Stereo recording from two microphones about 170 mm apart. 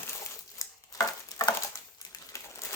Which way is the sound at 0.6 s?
20° left (ahead or behind).